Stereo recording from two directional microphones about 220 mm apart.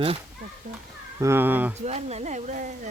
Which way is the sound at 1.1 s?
10° right (ahead or behind).